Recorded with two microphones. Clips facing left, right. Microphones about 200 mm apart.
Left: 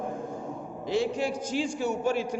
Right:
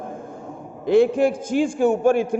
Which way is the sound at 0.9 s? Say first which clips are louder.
Right 11 dB; 55° right (ahead or behind).